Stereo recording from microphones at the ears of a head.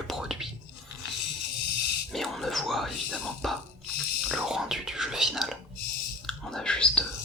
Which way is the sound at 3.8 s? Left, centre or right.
Left.